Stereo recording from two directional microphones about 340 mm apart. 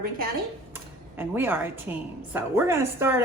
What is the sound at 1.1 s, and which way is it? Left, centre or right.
A woman's voice, centre.